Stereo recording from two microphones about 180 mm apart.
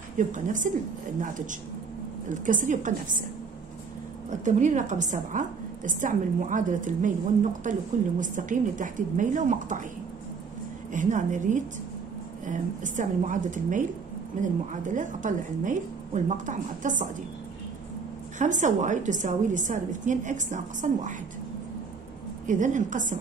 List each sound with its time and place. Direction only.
0.2 s a woman's voice: 45° right (ahead or behind)
4.3 s a woman's voice: 45° right (ahead or behind)
10.9 s a woman's voice: 45° right (ahead or behind)
18.4 s a woman's voice: 45° right (ahead or behind)
22.5 s a woman's voice: 45° right (ahead or behind)